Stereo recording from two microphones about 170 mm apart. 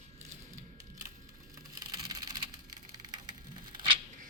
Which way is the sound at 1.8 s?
20° right (ahead or behind).